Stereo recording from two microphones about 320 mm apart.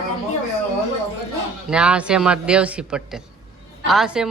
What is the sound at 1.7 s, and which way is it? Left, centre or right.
A woman's voice, centre.